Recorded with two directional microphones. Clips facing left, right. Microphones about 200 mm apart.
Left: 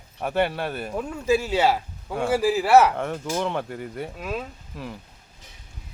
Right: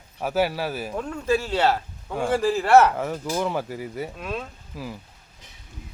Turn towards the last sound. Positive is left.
turn(degrees=0)  # may be behind; listen again after turning